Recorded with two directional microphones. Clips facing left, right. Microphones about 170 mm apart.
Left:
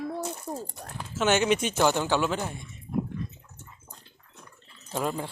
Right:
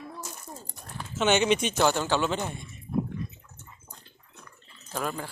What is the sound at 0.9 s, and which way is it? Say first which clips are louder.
Speech: even; 5° left (ahead or behind).